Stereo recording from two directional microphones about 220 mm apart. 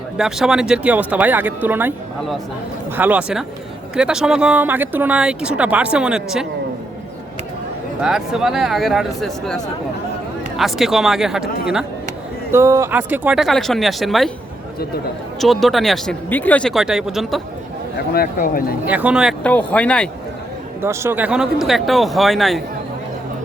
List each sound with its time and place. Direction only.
0.2 s speech: centre (ahead or behind)
2.9 s speech: 10° right (ahead or behind)
8.0 s speech: centre (ahead or behind)
10.6 s speech: centre (ahead or behind)
12.5 s speech: 15° right (ahead or behind)
15.4 s speech: centre (ahead or behind)
18.1 s speech: 40° left (ahead or behind)
18.9 s speech: 5° right (ahead or behind)
20.8 s speech: 10° right (ahead or behind)